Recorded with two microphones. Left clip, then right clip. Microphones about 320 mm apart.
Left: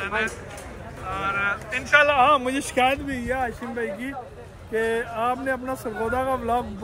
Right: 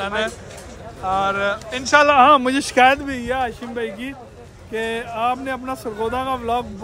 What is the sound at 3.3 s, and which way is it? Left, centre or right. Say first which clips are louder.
Speech: right 4 dB; centre.